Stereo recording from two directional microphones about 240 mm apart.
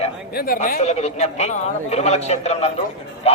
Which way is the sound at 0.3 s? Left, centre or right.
Left.